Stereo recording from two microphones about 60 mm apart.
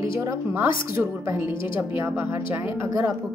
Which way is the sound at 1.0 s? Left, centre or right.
Right.